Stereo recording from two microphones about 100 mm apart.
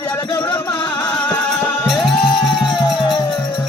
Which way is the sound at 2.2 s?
50° left (ahead or behind).